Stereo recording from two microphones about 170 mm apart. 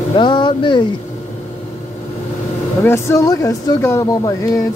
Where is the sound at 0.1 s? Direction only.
25° left (ahead or behind).